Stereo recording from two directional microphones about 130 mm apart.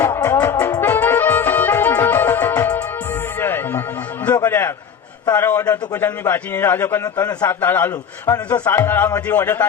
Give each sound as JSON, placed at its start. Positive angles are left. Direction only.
{"t": 0.3, "sound": "music", "side_deg": 15}
{"t": 4.4, "sound": "a sound", "side_deg": 15}
{"t": 5.3, "sound": "a man's voice", "side_deg": 15}